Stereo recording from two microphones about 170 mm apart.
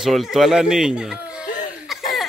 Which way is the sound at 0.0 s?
Centre (ahead or behind).